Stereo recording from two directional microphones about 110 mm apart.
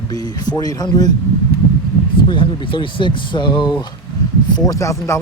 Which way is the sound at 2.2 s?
50° left (ahead or behind).